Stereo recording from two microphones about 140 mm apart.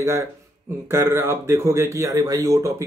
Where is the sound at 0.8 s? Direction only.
20° right (ahead or behind).